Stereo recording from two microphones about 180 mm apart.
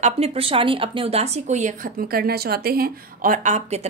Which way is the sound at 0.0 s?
35° right (ahead or behind).